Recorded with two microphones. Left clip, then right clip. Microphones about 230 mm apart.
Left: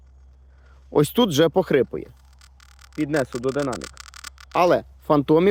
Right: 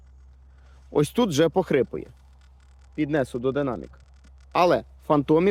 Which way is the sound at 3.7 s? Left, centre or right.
Left.